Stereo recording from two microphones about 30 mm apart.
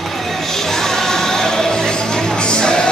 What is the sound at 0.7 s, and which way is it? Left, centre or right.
Music, centre.